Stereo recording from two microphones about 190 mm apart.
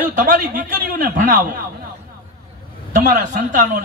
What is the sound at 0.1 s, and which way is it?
A man's voice, 45° right (ahead or behind).